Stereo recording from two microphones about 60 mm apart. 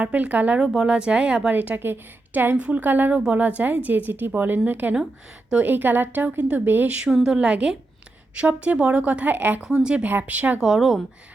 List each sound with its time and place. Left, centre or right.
0.0 s a woman's voice: right
0.6 s speech: centre
0.9 s a woman's voice: centre
7.1 s a woman's voice: centre
7.3 s a woman's voice: centre
9.6 s a woman's voice: centre; by 10.6 s right
10.6 s speech: centre